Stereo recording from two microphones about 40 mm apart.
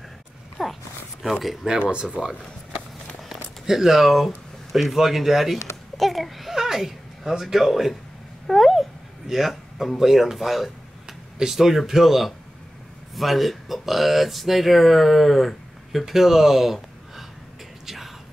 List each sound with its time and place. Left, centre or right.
0.6 s a sound: centre
1.4 s speech: centre
1.7 s speech: centre
3.6 s speech: centre
8.5 s a sound: centre
9.9 s speech: centre
17.8 s whispering: centre